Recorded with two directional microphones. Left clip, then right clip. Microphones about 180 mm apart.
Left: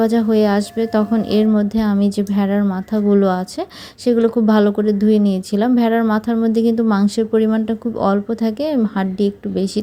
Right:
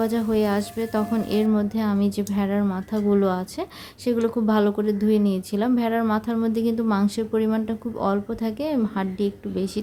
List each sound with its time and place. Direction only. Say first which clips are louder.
0.0 s a woman's voice: left 7 dB; 25° left (ahead or behind)